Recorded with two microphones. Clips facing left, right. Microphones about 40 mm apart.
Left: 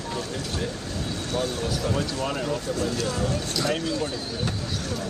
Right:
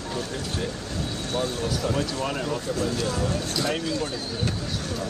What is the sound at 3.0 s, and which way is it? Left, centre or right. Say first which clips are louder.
Speech: even; right.